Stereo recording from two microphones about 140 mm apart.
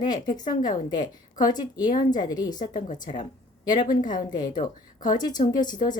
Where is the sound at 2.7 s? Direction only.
65° left (ahead or behind).